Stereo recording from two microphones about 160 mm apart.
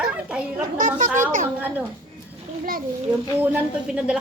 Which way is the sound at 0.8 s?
55° right (ahead or behind).